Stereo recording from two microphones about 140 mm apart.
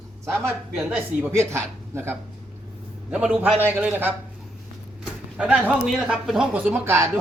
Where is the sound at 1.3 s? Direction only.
20° right (ahead or behind).